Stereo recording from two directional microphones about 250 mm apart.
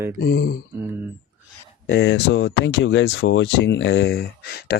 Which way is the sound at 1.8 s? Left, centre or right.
Left.